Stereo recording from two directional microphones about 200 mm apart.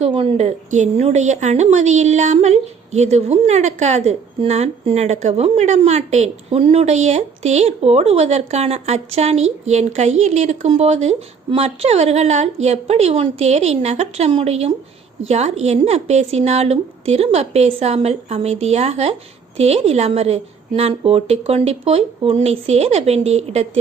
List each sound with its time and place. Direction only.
0.0 s a woman's voice: 30° right (ahead or behind)